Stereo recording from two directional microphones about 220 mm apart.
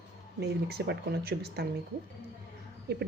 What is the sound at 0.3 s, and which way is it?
A woman's voice, 50° right (ahead or behind).